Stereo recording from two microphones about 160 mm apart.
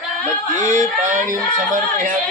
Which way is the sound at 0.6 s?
50° right (ahead or behind).